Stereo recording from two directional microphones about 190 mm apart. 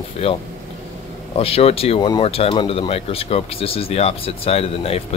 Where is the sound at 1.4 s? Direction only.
30° left (ahead or behind).